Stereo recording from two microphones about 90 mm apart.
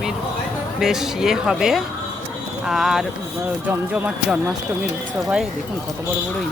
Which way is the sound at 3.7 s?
25° right (ahead or behind).